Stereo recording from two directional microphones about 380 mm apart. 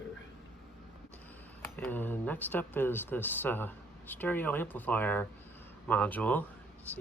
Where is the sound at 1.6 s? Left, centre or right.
Centre.